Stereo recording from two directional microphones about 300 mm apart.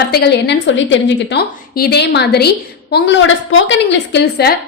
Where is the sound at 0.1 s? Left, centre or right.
Left.